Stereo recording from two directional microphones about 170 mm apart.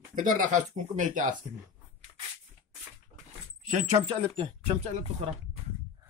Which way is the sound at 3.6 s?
45° right (ahead or behind).